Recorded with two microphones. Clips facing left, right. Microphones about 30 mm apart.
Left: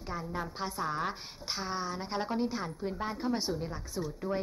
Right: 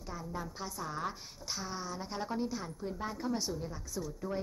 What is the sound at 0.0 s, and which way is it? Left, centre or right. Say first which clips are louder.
A woman's voice: left 4 dB; left.